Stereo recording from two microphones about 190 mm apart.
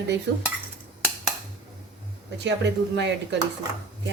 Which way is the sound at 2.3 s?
65° right (ahead or behind).